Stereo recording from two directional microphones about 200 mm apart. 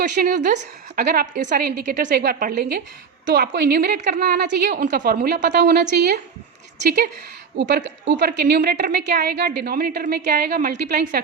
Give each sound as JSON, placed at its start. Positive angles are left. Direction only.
{"t": 0.0, "sound": "a woman's voice", "side_deg": -50}